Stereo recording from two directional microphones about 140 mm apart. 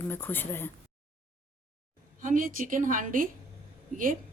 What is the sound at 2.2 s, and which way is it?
Speech, 70° right (ahead or behind).